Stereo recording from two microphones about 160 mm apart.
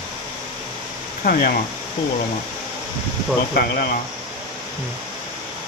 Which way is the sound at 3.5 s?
65° left (ahead or behind).